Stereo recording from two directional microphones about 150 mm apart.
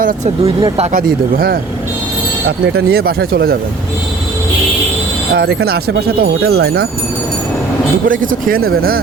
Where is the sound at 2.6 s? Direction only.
90° right.